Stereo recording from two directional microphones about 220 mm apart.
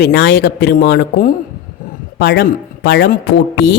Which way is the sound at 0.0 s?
50° left (ahead or behind).